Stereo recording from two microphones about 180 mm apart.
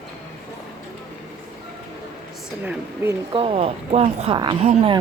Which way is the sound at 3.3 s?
30° right (ahead or behind).